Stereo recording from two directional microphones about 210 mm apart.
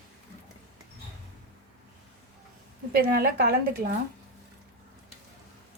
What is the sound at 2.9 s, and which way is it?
Speech, 45° right (ahead or behind).